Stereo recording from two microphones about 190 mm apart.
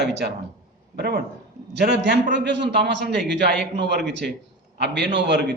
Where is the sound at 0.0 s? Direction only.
65° right (ahead or behind).